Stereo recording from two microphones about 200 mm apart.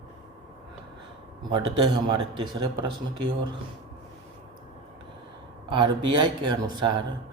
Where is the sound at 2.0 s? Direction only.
20° right (ahead or behind).